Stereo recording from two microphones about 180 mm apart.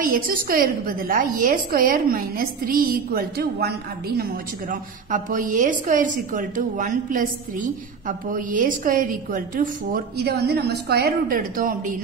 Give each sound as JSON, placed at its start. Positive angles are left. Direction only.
{"t": 0.0, "sound": "a woman's voice", "side_deg": -50}
{"t": 4.2, "sound": "a woman's voice", "side_deg": -50}